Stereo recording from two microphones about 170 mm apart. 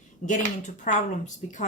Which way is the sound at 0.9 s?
50° left (ahead or behind).